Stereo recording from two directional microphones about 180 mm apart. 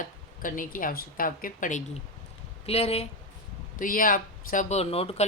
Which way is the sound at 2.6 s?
35° left (ahead or behind).